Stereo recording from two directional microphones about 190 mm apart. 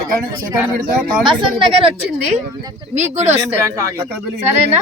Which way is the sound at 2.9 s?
35° right (ahead or behind).